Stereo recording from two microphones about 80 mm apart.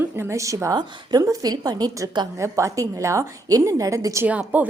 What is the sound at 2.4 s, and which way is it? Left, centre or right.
A woman's voice, right.